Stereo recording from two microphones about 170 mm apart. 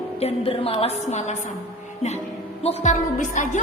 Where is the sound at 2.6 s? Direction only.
45° left (ahead or behind).